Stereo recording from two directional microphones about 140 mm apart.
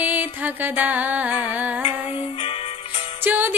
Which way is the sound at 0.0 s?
10° right (ahead or behind).